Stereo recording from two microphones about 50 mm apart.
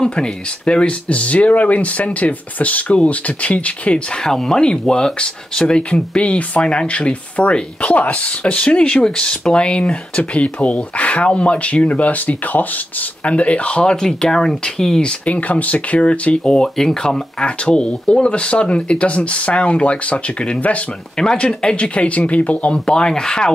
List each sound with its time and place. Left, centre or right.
0.0 s speech: centre
4.1 s speech: centre
14.0 s speech: centre
15.0 s speech: left